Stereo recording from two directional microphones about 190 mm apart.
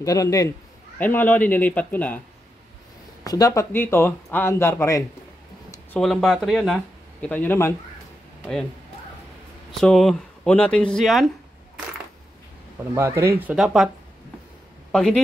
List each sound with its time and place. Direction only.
0.0 s speech: 20° left (ahead or behind)
3.3 s speech: 20° left (ahead or behind)
5.9 s speech: centre (ahead or behind)
9.7 s speech: centre (ahead or behind)
12.9 s speech: 15° right (ahead or behind)
14.9 s speech: 5° left (ahead or behind)